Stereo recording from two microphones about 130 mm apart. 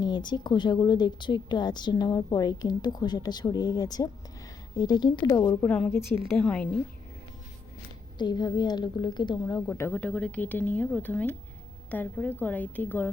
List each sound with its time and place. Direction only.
0.0 s a woman's voice: 35° left (ahead or behind)
5.6 s speech: 10° left (ahead or behind)
8.2 s a woman's voice: 35° left (ahead or behind)
9.6 s speech: 20° left (ahead or behind)
10.0 s speech: 10° left (ahead or behind)